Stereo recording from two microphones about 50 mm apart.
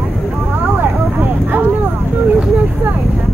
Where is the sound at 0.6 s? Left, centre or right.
Right.